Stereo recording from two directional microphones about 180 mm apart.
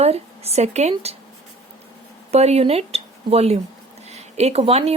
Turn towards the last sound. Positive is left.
turn(degrees=-35)  # may be behind; listen again after turning